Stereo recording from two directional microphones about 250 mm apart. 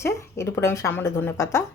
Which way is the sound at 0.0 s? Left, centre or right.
Centre.